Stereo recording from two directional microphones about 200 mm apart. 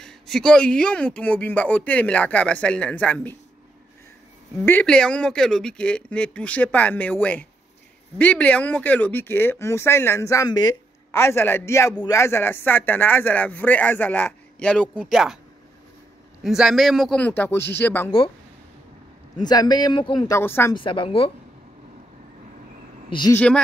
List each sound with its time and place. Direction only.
0.0 s speech: 5° left (ahead or behind)
4.6 s speech: 5° left (ahead or behind)
16.4 s speech: centre (ahead or behind)
19.4 s speech: 20° left (ahead or behind)
20.7 s speech: 25° left (ahead or behind)
23.0 s speech: 25° left (ahead or behind)
23.3 s speech: 5° left (ahead or behind)